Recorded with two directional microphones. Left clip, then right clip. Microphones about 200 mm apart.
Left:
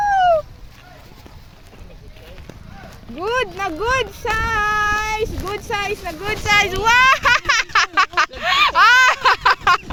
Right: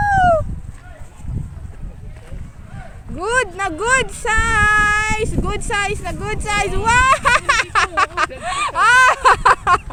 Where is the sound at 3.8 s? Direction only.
20° right (ahead or behind).